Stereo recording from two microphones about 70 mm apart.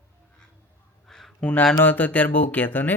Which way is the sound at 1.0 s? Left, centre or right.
Centre.